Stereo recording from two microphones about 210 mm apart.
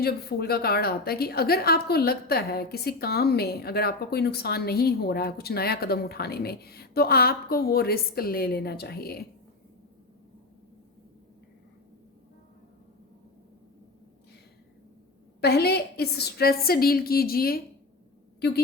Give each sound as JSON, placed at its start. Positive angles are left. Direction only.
{"t": 0.0, "sound": "a woman's voice", "side_deg": 45}
{"t": 15.4, "sound": "a woman's voice", "side_deg": 50}